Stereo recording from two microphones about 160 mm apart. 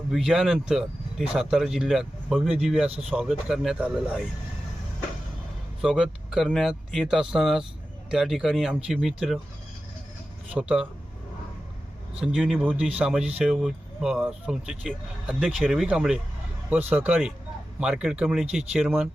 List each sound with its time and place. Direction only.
0.1 s speech: 5° right (ahead or behind)
5.8 s speech: 5° right (ahead or behind)
10.5 s speech: 5° right (ahead or behind)
12.1 s speech: 5° right (ahead or behind)